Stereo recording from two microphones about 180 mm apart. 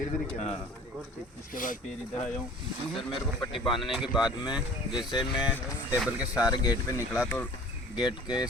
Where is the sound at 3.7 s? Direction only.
30° left (ahead or behind).